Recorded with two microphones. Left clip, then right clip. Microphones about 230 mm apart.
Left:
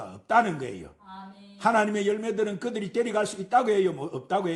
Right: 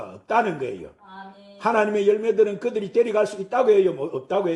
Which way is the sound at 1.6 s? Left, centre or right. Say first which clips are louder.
Right 4 dB; left.